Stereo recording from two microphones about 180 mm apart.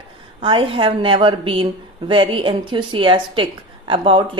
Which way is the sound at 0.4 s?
30° right (ahead or behind).